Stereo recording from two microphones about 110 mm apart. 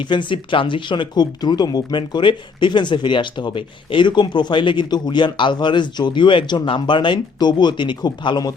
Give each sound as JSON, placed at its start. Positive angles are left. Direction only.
{"t": 0.0, "sound": "speech", "side_deg": 45}